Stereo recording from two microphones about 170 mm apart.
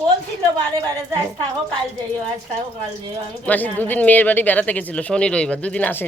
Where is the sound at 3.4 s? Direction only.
10° left (ahead or behind).